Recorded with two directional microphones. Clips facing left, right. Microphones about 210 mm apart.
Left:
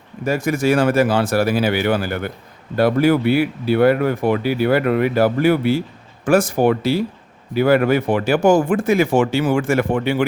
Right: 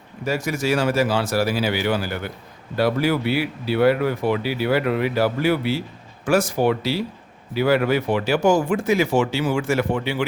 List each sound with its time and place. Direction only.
0.3 s speech: 50° left (ahead or behind)